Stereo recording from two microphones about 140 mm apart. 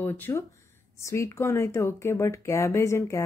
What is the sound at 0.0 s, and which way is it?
Speech, 15° left (ahead or behind).